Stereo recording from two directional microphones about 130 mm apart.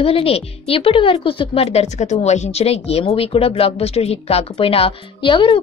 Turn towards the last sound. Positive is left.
turn(degrees=40)  # may be behind; listen again after turning